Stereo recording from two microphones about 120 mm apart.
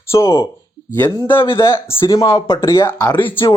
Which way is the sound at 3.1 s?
45° left (ahead or behind).